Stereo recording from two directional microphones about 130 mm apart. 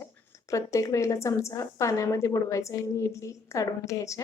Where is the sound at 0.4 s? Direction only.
25° left (ahead or behind).